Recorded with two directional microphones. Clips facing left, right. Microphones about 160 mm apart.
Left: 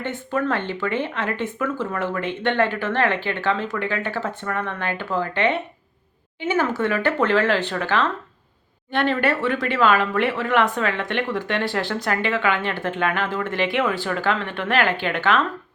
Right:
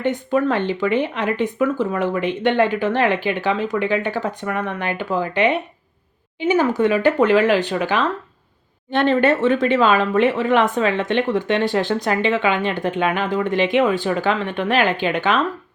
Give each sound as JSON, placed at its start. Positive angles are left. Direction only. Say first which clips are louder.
{"t": 0.0, "sound": "speech", "louder": "right 6 dB", "side_deg": -15}